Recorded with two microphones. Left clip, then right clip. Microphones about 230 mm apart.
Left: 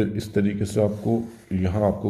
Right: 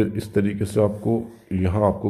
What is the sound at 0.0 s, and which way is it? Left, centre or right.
Speech, centre.